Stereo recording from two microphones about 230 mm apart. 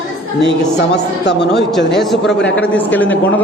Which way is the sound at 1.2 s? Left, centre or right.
Left.